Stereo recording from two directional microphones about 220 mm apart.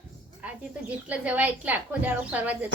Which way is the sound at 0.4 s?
5° right (ahead or behind).